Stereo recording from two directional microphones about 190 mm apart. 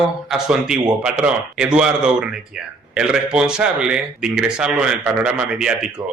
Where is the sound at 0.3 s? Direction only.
5° right (ahead or behind).